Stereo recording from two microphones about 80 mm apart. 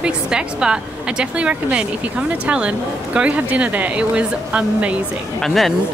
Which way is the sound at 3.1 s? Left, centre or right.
Centre.